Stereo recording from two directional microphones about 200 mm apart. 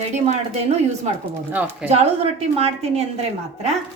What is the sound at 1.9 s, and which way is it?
A woman's voice, 30° right (ahead or behind).